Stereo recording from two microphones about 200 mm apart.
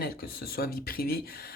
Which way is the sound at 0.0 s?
50° left (ahead or behind).